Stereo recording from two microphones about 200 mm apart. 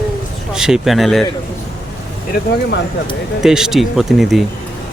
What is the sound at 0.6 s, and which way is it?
Speech, 5° right (ahead or behind).